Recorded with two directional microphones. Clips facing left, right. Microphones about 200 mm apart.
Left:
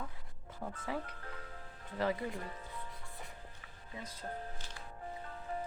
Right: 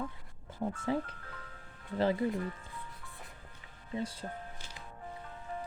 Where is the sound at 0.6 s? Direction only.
25° right (ahead or behind).